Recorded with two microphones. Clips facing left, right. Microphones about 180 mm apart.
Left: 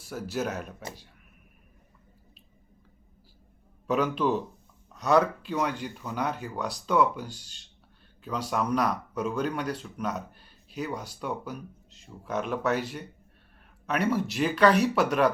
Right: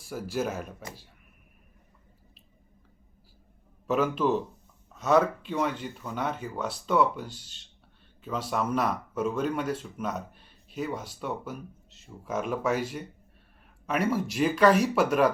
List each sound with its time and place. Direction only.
0.1 s speech: 5° right (ahead or behind)
3.8 s speech: 5° right (ahead or behind)
7.3 s speech: 45° left (ahead or behind)
8.2 s speech: centre (ahead or behind)